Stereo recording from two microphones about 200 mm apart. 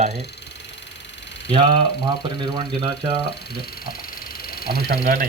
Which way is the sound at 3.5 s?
50° left (ahead or behind).